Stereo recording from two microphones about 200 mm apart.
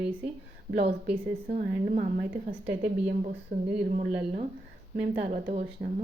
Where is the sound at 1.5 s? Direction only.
40° right (ahead or behind).